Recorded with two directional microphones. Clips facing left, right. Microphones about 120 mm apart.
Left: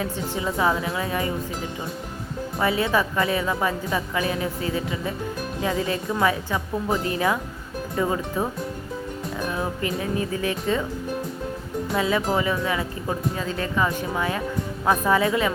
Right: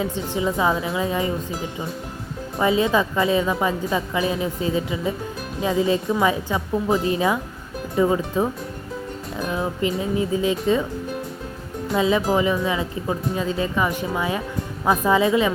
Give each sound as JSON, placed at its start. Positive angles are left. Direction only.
{"t": 0.0, "sound": "speech", "side_deg": -20}
{"t": 2.6, "sound": "speech", "side_deg": -20}
{"t": 9.5, "sound": "speech", "side_deg": -20}
{"t": 11.9, "sound": "speech", "side_deg": -20}